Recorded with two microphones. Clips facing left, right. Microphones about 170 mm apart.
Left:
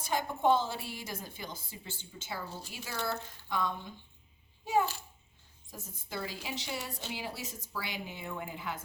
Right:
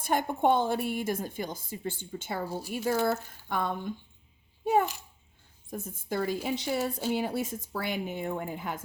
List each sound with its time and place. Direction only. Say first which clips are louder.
0.0 s a woman's voice: right 4 dB; 55° right (ahead or behind)
2.5 s a woman's voice: right 9 dB; 10° right (ahead or behind)
2.7 s a woman's voice: right 10 dB; 50° right (ahead or behind)